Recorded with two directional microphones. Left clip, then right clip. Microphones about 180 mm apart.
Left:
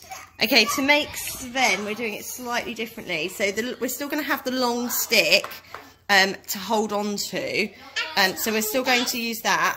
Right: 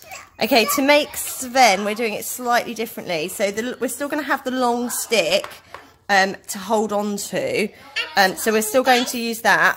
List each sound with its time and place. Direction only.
0.4 s a woman's voice: 35° right (ahead or behind)